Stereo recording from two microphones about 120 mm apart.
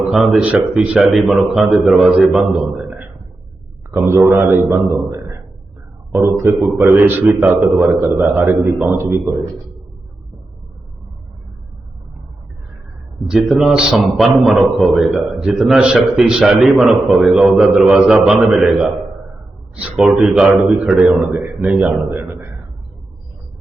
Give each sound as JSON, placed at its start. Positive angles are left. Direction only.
{"t": 0.1, "sound": "a man's voice", "side_deg": 0}
{"t": 3.9, "sound": "a man's voice", "side_deg": -20}
{"t": 6.8, "sound": "a man's voice", "side_deg": -15}
{"t": 13.2, "sound": "a man's voice", "side_deg": -5}